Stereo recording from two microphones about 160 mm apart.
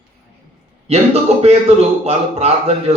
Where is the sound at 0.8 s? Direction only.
40° right (ahead or behind).